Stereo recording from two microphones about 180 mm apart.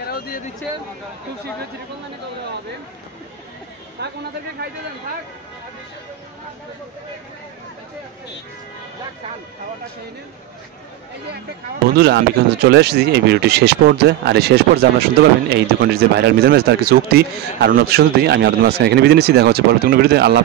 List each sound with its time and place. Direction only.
0.0 s a sound: 60° left (ahead or behind)
4.0 s speech: 70° right (ahead or behind)
12.0 s speech: 65° right (ahead or behind)